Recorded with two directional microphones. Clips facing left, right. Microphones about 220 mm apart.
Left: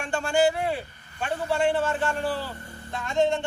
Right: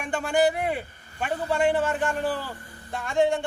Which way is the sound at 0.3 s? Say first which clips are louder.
Even; 15° right (ahead or behind).